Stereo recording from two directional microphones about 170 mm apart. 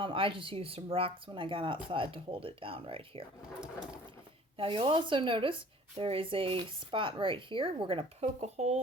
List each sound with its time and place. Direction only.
0.0 s speech: 30° right (ahead or behind)
4.5 s speech: 30° right (ahead or behind)